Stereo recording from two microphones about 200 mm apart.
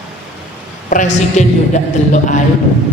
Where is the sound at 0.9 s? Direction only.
40° left (ahead or behind).